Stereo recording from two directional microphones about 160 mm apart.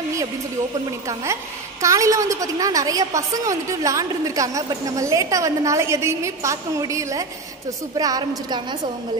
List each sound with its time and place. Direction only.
1.0 s a woman's voice: 20° right (ahead or behind)